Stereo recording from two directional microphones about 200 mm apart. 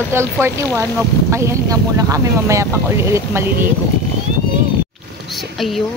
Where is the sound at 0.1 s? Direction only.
10° right (ahead or behind).